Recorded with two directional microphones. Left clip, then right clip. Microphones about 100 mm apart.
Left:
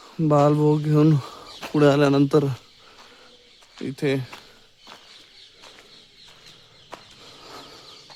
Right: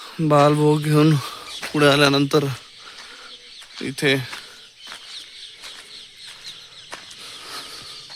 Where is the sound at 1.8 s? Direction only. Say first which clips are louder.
Right 2 dB; 35° left (ahead or behind).